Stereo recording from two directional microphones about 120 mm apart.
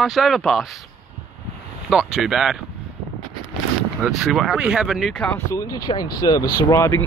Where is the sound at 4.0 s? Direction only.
Centre (ahead or behind).